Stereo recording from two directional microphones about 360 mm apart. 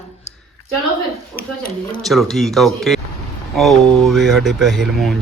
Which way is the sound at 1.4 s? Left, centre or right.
Left.